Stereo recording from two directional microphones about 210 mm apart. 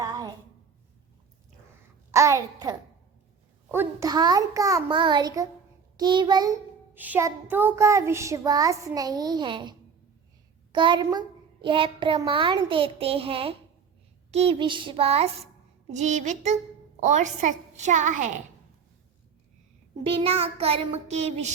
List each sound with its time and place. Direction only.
2.1 s a child's voice: 15° right (ahead or behind); by 18.3 s 35° right (ahead or behind)
20.1 s a child's voice: 25° right (ahead or behind)